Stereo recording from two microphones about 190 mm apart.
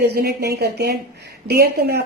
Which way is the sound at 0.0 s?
55° right (ahead or behind).